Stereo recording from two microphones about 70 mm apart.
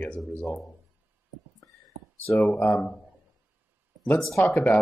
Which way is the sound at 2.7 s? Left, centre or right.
Centre.